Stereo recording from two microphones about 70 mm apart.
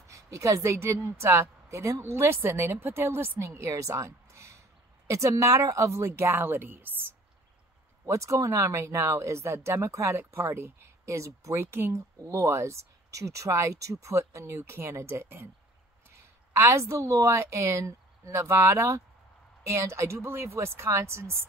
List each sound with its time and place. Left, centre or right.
0.0 s a woman's voice: right
8.0 s a woman's voice: right